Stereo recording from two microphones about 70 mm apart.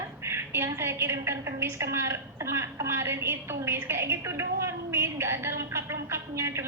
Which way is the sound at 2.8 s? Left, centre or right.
Right.